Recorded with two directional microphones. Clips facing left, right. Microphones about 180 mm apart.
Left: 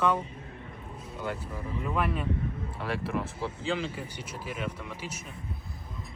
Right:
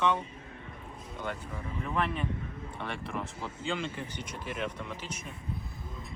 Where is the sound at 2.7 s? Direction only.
5° left (ahead or behind).